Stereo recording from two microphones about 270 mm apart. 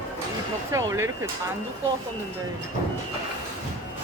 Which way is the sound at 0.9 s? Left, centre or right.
Centre.